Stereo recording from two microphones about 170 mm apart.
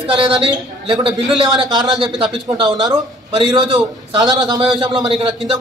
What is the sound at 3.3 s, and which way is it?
Speech, 35° right (ahead or behind).